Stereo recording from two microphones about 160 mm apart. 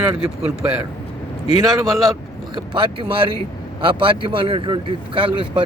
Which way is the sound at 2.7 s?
30° right (ahead or behind).